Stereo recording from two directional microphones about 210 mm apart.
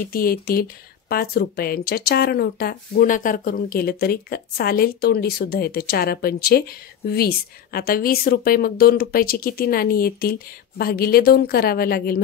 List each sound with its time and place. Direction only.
0.0 s speech: 45° left (ahead or behind)